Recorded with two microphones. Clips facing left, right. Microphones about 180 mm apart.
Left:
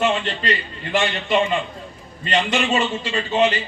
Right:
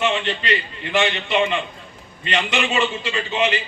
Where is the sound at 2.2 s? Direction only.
40° left (ahead or behind).